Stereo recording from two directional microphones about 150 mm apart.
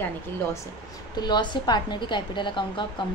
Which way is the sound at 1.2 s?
30° left (ahead or behind).